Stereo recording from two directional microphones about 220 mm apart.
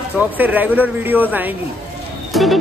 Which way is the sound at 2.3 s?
Centre (ahead or behind).